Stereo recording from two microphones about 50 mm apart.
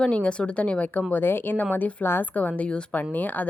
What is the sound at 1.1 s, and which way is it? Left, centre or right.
Speech, left.